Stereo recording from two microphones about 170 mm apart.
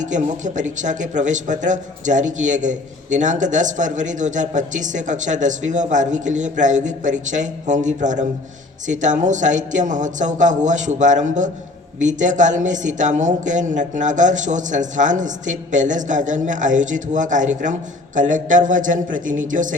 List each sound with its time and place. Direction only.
0.0 s speech: 45° right (ahead or behind)